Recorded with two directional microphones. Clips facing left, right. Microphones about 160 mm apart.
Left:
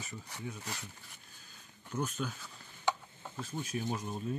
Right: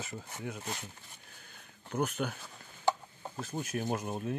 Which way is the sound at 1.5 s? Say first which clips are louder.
Right 4 dB; 65° right (ahead or behind).